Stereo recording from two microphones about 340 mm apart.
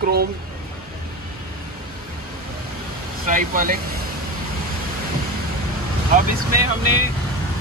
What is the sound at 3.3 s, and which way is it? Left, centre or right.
Speech, right.